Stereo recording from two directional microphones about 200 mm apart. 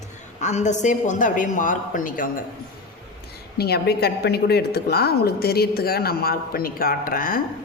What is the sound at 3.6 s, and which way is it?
A woman's voice, 55° left (ahead or behind).